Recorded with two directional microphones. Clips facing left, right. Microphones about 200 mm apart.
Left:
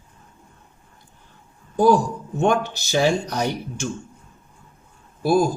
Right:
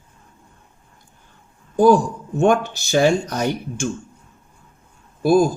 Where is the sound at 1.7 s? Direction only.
50° right (ahead or behind).